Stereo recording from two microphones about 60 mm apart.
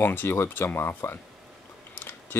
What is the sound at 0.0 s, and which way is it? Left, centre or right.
Speech, left.